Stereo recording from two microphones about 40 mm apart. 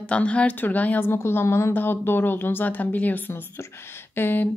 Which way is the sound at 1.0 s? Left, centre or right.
Left.